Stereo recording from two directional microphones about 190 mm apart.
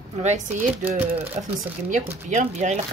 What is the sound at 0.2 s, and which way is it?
Speech, 40° right (ahead or behind).